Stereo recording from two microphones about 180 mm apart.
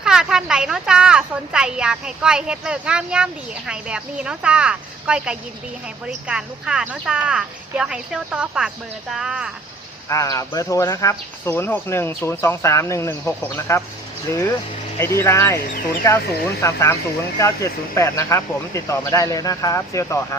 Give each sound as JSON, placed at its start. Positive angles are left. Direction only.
{"t": 0.0, "sound": "speech", "side_deg": -5}
{"t": 10.1, "sound": "speech", "side_deg": 15}